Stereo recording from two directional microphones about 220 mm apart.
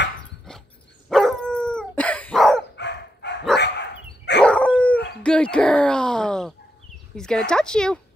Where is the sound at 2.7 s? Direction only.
50° left (ahead or behind).